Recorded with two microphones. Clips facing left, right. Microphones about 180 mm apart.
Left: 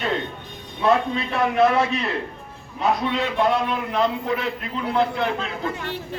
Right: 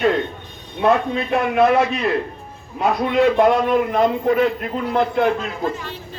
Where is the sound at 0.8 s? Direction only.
55° right (ahead or behind).